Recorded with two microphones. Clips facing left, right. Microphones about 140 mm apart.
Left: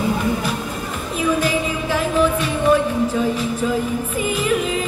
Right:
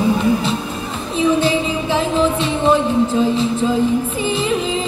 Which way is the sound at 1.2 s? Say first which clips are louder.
Right 4 dB; 25° right (ahead or behind).